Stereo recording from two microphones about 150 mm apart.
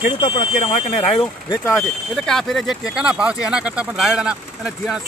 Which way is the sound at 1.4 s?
20° left (ahead or behind).